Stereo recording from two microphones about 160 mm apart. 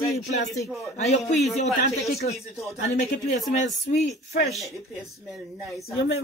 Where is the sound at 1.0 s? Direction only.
45° left (ahead or behind).